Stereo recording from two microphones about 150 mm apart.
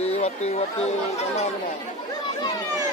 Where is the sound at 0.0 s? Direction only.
45° left (ahead or behind).